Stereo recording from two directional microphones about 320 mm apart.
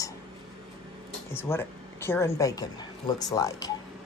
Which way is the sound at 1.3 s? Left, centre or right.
Centre.